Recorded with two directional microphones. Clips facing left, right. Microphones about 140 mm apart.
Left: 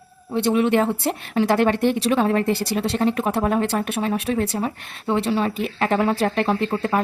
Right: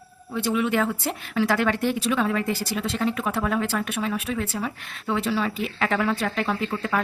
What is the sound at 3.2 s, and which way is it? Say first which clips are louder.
A woman's voice: left 4 dB; 35° left (ahead or behind).